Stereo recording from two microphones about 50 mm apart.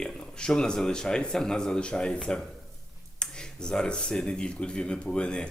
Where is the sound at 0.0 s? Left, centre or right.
Centre.